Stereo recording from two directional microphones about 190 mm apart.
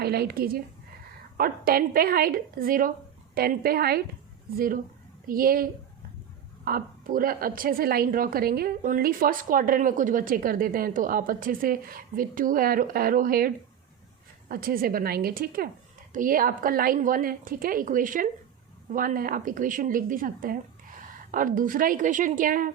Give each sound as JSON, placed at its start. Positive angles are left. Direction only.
{"t": 0.0, "sound": "speech", "side_deg": -55}
{"t": 6.7, "sound": "speech", "side_deg": -50}